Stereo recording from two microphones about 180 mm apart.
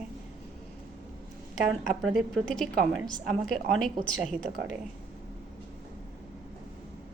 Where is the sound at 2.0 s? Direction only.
Centre (ahead or behind).